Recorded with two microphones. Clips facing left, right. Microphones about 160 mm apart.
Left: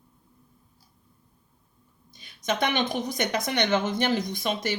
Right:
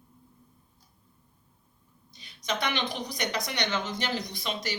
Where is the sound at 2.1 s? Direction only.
50° left (ahead or behind).